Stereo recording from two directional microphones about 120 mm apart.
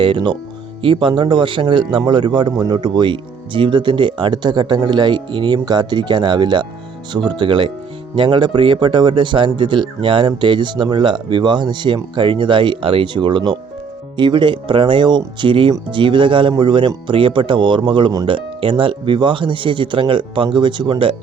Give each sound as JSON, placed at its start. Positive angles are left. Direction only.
{"t": 0.0, "sound": "speech", "side_deg": -45}